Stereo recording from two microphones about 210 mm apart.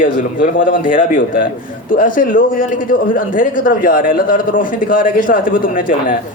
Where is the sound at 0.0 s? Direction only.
40° left (ahead or behind).